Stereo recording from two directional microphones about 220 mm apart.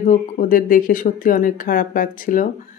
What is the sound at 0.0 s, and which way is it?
A woman's voice, 35° left (ahead or behind).